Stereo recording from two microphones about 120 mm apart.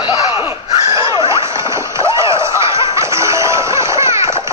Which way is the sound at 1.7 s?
25° right (ahead or behind).